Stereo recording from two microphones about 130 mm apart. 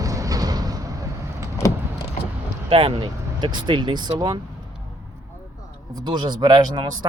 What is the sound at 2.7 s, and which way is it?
Speech, 40° right (ahead or behind).